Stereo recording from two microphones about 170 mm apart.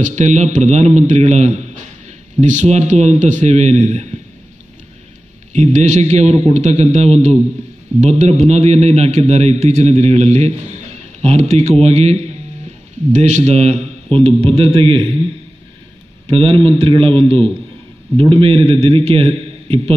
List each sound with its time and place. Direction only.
0.0 s a man's voice: 45° right (ahead or behind)
5.5 s a man's voice: 40° right (ahead or behind)
16.3 s a man's voice: 35° right (ahead or behind)